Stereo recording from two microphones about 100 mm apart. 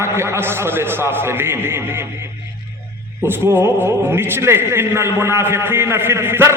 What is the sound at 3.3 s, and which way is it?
A man's voice, 20° right (ahead or behind).